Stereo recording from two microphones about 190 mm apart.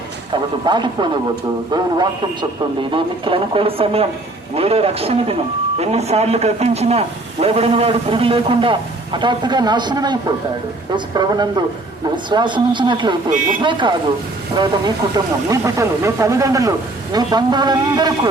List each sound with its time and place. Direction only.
0.3 s speech: 25° right (ahead or behind)